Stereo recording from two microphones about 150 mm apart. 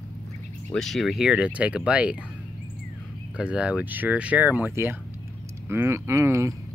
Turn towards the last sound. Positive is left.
turn(degrees=-20)  # may be behind; listen again after turning